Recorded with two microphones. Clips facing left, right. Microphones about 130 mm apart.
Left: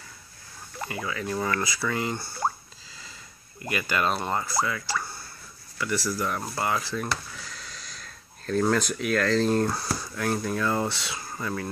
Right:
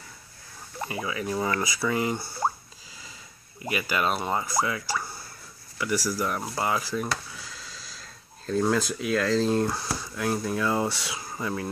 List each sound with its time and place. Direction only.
0.7 s speech: 20° right (ahead or behind)
3.6 s speech: 10° right (ahead or behind)
9.7 s speech: centre (ahead or behind)
10.1 s speech: 15° right (ahead or behind)